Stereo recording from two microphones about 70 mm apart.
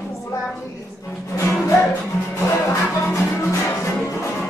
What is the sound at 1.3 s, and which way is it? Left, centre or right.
Music, left.